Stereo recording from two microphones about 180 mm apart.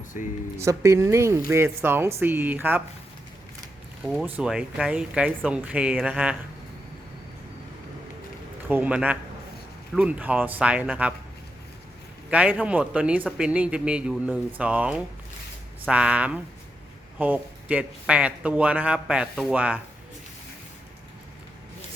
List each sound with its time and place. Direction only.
0.6 s a man's voice: 15° right (ahead or behind)
4.0 s a man's voice: centre (ahead or behind)
8.6 s a man's voice: 10° right (ahead or behind)
12.3 s a man's voice: 5° right (ahead or behind)